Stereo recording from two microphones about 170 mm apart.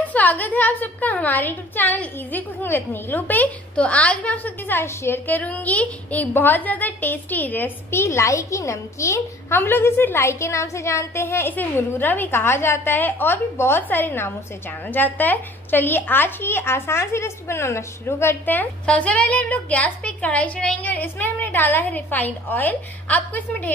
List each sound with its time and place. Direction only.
0.0 s a woman's voice: 10° left (ahead or behind)